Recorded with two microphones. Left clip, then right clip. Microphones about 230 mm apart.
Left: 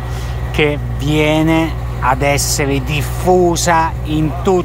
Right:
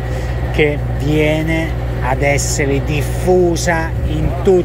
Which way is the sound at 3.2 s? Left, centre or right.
Left.